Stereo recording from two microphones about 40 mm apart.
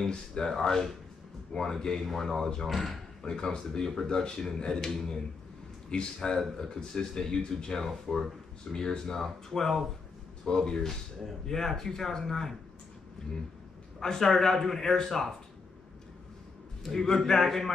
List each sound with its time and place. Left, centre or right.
0.0 s a man's voice: centre
3.2 s a man's voice: centre
10.4 s a man's voice: centre
13.9 s a man's voice: centre
16.9 s a man's voice: centre